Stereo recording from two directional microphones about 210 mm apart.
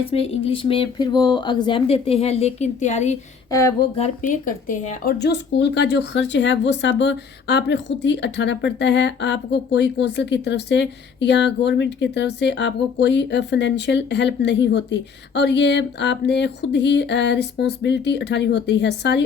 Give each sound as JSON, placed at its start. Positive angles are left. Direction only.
{"t": 0.0, "sound": "speech", "side_deg": 25}
{"t": 3.5, "sound": "speech", "side_deg": 15}
{"t": 3.9, "sound": "speech", "side_deg": 35}
{"t": 5.2, "sound": "speech", "side_deg": 55}